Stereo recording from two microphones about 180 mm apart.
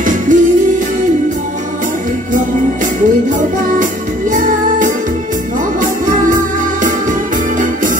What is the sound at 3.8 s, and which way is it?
Music, 45° right (ahead or behind).